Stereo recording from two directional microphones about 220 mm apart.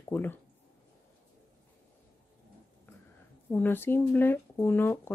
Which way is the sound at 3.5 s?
10° left (ahead or behind).